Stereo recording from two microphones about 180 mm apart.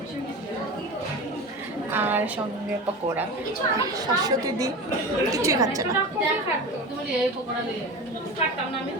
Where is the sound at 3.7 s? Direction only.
20° right (ahead or behind).